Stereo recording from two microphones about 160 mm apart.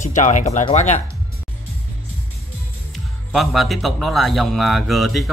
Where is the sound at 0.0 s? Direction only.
50° left (ahead or behind).